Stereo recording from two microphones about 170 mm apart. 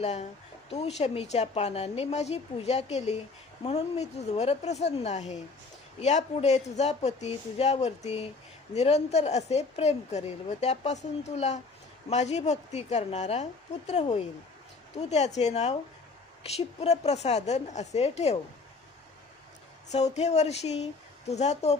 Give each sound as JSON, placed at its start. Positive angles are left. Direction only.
{"t": 0.0, "sound": "a woman's voice", "side_deg": 40}
{"t": 19.9, "sound": "a woman's voice", "side_deg": 40}